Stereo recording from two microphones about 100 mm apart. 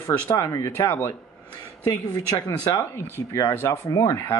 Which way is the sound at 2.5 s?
25° left (ahead or behind).